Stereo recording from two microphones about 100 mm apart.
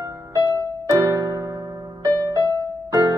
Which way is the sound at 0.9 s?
35° right (ahead or behind).